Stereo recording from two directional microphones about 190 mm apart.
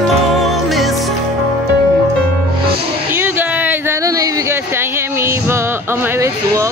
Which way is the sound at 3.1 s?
10° right (ahead or behind).